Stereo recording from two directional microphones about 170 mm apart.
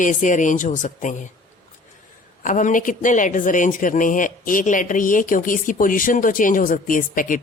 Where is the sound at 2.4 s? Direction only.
50° left (ahead or behind).